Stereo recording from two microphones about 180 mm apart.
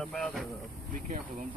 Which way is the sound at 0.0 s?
5° left (ahead or behind).